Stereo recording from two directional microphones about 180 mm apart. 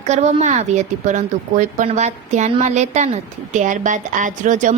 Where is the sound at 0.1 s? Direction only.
40° right (ahead or behind).